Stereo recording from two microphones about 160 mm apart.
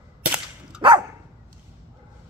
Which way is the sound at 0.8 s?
30° right (ahead or behind).